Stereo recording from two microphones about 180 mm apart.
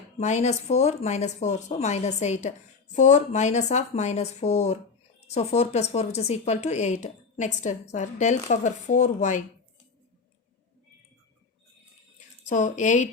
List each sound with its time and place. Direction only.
0.2 s speech: 40° left (ahead or behind)
12.5 s speech: 45° left (ahead or behind)